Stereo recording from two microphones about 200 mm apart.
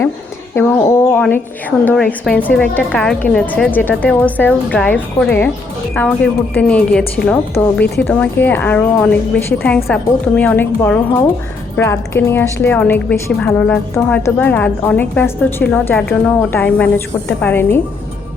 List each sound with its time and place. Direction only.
0.5 s a woman's voice: 10° left (ahead or behind)